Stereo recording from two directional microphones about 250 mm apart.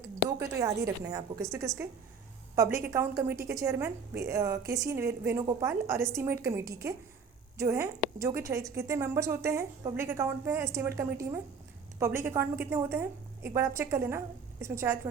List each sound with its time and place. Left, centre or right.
0.6 s a woman's voice: centre